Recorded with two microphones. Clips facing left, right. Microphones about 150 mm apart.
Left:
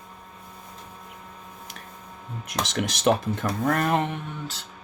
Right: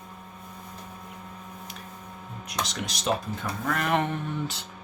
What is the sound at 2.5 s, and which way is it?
Speech, 75° left (ahead or behind).